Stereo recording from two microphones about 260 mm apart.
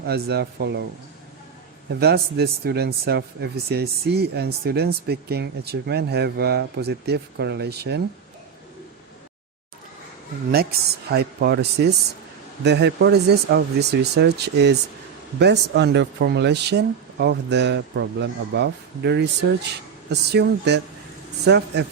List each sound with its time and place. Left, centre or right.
0.0 s speech: right
1.9 s speech: right
10.5 s speech: right